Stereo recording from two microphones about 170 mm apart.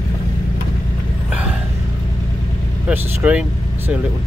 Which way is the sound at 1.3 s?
10° right (ahead or behind).